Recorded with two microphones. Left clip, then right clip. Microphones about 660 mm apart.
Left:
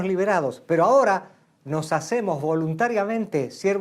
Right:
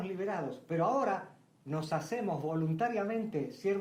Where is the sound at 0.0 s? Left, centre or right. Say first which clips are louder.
Left 15 dB; left.